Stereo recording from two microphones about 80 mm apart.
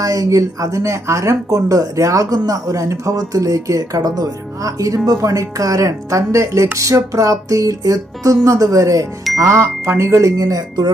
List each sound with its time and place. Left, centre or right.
0.0 s speech: right